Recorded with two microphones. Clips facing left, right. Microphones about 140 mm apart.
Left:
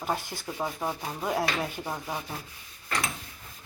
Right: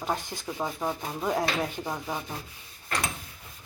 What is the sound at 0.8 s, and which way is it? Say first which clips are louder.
Speech: right 2 dB; 5° left (ahead or behind).